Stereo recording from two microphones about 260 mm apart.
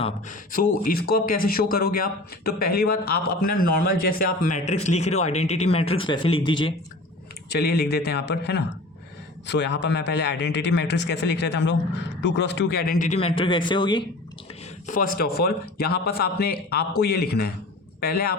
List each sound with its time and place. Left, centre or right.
0.0 s a man's voice: left
7.5 s a man's voice: left; by 14.0 s centre
14.8 s a man's voice: left